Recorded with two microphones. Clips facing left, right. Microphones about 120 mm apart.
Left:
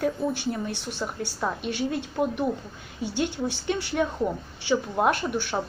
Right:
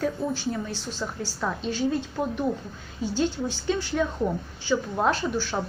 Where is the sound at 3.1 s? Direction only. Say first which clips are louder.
Right 1 dB; 60° left (ahead or behind).